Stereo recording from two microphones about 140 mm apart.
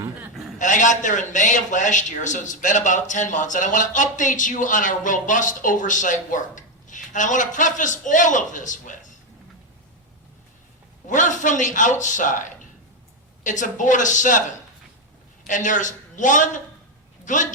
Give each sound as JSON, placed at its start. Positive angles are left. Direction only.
{"t": 0.6, "sound": "a man's voice", "side_deg": 60}
{"t": 11.0, "sound": "a man's voice", "side_deg": 65}
{"t": 15.4, "sound": "a man's voice", "side_deg": 65}